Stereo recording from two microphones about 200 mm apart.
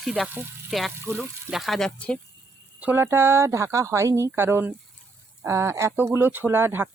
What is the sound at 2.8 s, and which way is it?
Speech, 10° right (ahead or behind).